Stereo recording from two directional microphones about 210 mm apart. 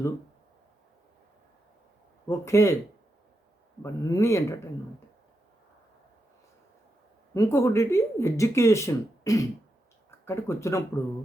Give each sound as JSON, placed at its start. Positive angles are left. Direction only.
{"t": 2.2, "sound": "speech", "side_deg": 15}
{"t": 3.8, "sound": "speech", "side_deg": 15}
{"t": 7.3, "sound": "speech", "side_deg": 15}